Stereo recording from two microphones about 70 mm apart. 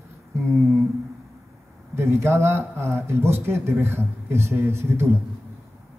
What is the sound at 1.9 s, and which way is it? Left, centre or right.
A man's voice, right.